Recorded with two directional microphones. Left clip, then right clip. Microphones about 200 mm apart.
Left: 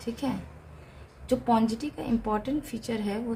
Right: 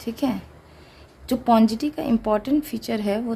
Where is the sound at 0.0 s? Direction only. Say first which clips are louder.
Right 6 dB; 45° right (ahead or behind).